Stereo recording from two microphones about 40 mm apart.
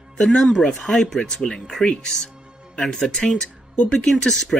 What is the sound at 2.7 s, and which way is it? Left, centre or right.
Speech, centre.